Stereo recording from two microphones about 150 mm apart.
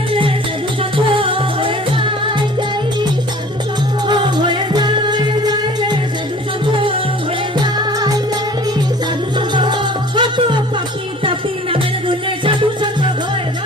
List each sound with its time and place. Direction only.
0.8 s music: 35° right (ahead or behind)
4.0 s music: 30° right (ahead or behind)
7.6 s music: 30° right (ahead or behind)
9.6 s music: 30° right (ahead or behind)